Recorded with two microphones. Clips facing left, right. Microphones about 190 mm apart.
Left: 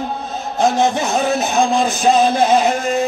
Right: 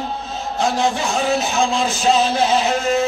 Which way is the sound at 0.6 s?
20° left (ahead or behind).